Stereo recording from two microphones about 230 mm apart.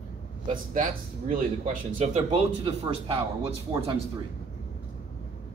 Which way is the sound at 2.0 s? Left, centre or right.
Right.